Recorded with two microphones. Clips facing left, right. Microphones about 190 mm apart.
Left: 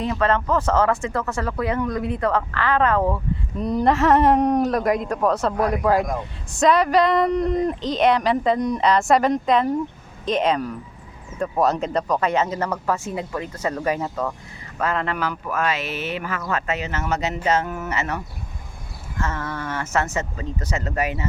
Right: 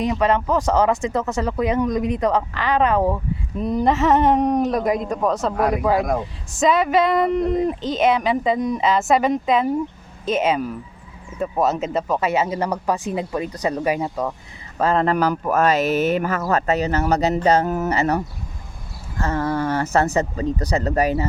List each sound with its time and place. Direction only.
0.0 s speech: 15° right (ahead or behind)
3.6 s speech: centre (ahead or behind)
14.8 s speech: 35° right (ahead or behind)
19.2 s speech: 35° right (ahead or behind)